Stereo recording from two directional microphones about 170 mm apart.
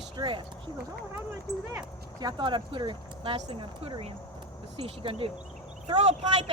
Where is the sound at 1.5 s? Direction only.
75° right (ahead or behind).